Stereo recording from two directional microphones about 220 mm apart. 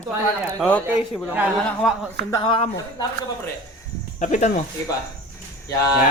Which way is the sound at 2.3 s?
20° left (ahead or behind).